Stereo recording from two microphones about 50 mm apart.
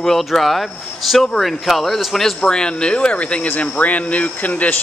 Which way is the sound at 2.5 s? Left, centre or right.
Centre.